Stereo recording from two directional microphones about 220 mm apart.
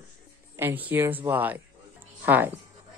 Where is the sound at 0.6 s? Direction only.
10° right (ahead or behind).